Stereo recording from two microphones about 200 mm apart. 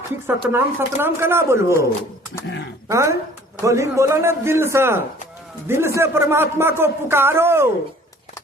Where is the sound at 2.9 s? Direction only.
15° right (ahead or behind).